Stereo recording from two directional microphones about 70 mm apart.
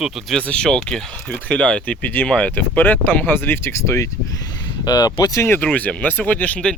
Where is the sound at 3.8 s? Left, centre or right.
Left.